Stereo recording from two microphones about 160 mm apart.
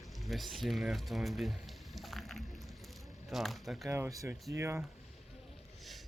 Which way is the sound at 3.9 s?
15° right (ahead or behind).